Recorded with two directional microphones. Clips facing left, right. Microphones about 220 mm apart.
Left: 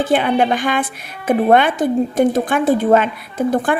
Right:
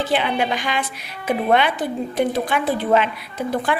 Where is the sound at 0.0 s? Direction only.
50° left (ahead or behind).